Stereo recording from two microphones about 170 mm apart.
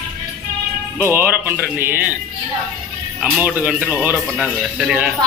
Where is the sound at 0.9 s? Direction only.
15° right (ahead or behind).